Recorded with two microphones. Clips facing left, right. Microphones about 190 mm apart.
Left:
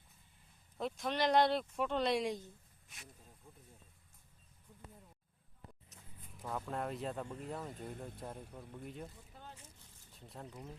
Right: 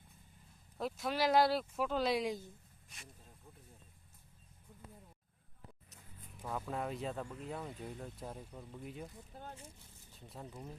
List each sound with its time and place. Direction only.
0.8 s speech: 5° right (ahead or behind)
6.4 s speech: centre (ahead or behind)
10.1 s a sound: centre (ahead or behind)
10.4 s speech: 10° right (ahead or behind)